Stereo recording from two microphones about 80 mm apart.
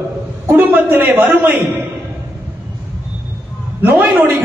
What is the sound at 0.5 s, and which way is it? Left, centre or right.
Speech, right.